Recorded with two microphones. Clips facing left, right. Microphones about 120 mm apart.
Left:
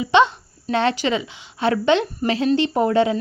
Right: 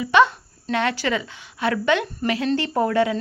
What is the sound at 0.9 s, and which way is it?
A woman's voice, 20° left (ahead or behind).